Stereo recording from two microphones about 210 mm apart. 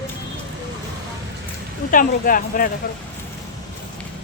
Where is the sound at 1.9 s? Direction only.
40° left (ahead or behind).